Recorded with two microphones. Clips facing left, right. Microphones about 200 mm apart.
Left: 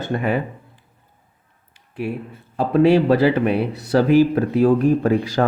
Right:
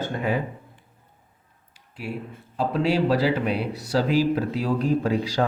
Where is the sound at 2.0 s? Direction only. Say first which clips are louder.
Left 4 dB; 55° left (ahead or behind).